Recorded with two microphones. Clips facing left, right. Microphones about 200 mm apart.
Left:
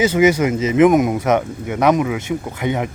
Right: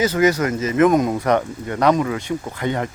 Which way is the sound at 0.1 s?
10° left (ahead or behind).